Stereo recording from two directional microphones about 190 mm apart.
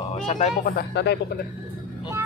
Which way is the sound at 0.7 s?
65° left (ahead or behind).